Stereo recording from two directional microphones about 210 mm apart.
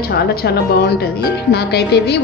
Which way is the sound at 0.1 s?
50° left (ahead or behind).